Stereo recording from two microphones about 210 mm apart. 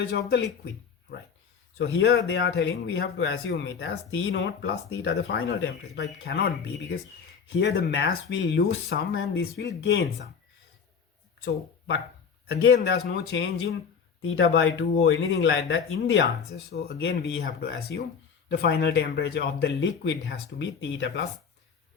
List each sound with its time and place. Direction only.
0.1 s speech: 50° left (ahead or behind)
1.8 s speech: 50° left (ahead or behind)
12.7 s speech: 50° left (ahead or behind)
14.2 s speech: 70° left (ahead or behind)